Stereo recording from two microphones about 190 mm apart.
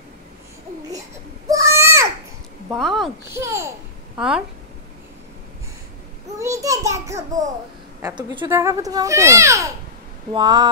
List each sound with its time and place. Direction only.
1.5 s goat: 15° right (ahead or behind)
2.7 s speech: centre (ahead or behind)
3.3 s a child's voice: 15° right (ahead or behind)
6.4 s a child's voice: 15° right (ahead or behind)
8.5 s a child's voice: 15° right (ahead or behind)